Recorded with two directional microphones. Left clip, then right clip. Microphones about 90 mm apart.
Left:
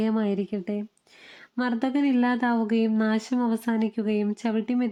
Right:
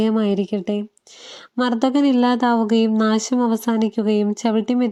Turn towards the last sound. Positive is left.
turn(degrees=-30)  # may be behind; listen again after turning